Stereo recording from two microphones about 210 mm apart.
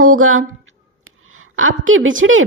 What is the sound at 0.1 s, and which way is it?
A woman's voice, 70° right (ahead or behind).